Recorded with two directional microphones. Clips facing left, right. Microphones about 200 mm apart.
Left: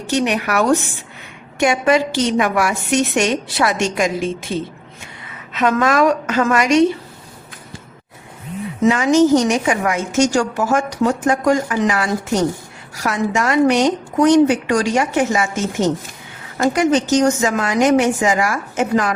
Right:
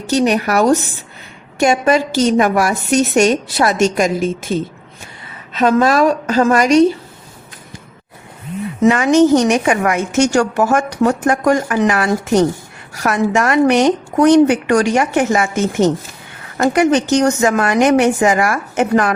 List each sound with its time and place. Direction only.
0.1 s a woman's voice: 40° right (ahead or behind)
5.5 s a woman's voice: 35° right (ahead or behind)
8.8 s a woman's voice: 60° right (ahead or behind)
16.6 s a woman's voice: 65° right (ahead or behind)